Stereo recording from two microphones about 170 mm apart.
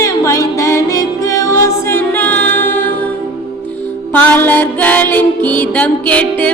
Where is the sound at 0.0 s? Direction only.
20° left (ahead or behind).